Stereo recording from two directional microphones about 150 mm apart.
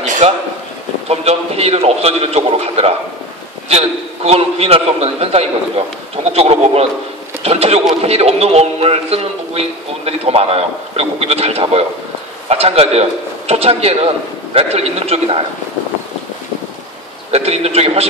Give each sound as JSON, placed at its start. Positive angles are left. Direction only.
{"t": 0.2, "sound": "a man's voice", "side_deg": -45}
{"t": 17.3, "sound": "a man's voice", "side_deg": -45}